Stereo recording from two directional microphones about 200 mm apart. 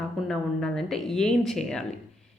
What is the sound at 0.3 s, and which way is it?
A woman's voice, centre (ahead or behind).